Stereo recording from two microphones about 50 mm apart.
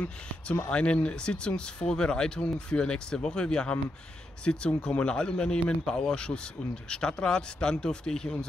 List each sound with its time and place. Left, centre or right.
0.7 s speech: left